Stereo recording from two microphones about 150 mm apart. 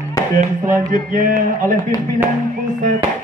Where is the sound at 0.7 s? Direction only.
60° right (ahead or behind).